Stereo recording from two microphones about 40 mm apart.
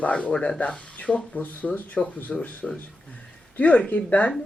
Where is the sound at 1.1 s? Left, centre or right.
Centre.